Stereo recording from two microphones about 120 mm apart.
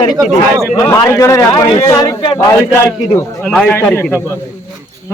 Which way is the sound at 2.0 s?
45° left (ahead or behind).